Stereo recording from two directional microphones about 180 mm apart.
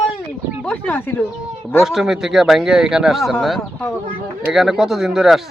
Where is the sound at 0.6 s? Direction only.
10° left (ahead or behind).